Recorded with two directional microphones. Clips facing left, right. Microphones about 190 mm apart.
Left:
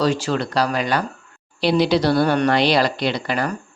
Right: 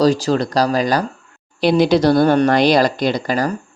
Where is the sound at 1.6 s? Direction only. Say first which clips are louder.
Right 4 dB; 50° right (ahead or behind).